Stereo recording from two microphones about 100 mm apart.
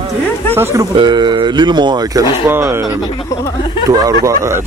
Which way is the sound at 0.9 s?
50° right (ahead or behind).